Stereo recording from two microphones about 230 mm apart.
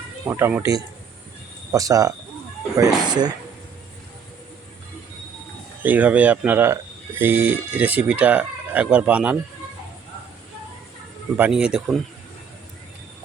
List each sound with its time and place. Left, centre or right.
0.3 s speech: centre
5.8 s speech: centre
11.3 s speech: centre